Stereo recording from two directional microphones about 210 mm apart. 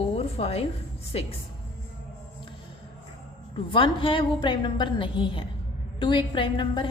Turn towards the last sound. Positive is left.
turn(degrees=25)  # may be behind; listen again after turning